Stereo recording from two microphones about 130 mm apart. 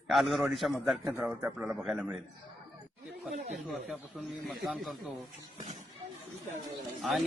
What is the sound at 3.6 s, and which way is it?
A man's voice, centre (ahead or behind).